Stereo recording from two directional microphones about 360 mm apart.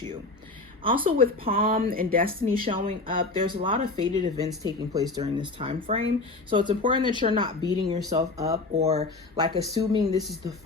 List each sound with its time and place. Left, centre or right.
0.8 s a woman's voice: centre